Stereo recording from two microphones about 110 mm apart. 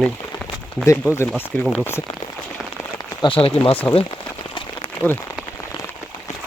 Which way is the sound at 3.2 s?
50° left (ahead or behind).